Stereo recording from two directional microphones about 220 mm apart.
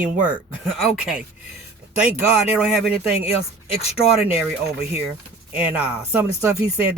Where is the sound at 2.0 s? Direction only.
5° right (ahead or behind).